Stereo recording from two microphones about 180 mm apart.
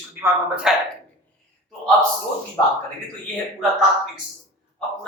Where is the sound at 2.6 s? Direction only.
20° left (ahead or behind).